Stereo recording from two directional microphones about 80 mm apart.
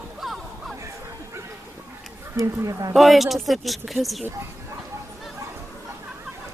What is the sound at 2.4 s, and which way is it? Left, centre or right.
Speech, right.